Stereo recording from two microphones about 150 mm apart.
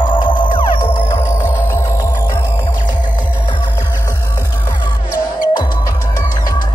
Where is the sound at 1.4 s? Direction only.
15° left (ahead or behind).